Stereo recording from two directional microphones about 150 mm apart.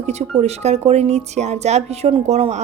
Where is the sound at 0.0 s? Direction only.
45° right (ahead or behind).